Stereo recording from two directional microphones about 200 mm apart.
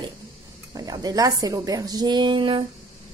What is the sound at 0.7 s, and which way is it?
Speech, 20° right (ahead or behind).